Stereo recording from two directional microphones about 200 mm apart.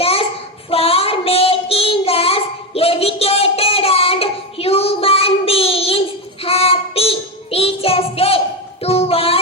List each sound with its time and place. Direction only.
0.0 s child singing: 30° left (ahead or behind)
8.8 s music: 30° left (ahead or behind)